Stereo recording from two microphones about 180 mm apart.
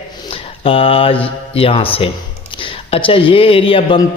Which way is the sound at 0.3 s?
30° left (ahead or behind).